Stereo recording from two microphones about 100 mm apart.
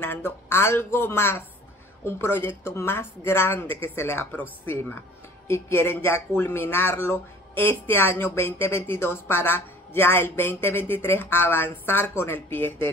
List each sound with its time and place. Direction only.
0.0 s speech: 20° left (ahead or behind)